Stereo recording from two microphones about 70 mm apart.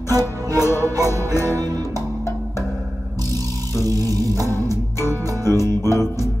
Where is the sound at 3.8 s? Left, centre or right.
Right.